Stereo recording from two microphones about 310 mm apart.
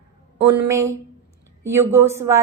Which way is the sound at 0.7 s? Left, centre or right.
Centre.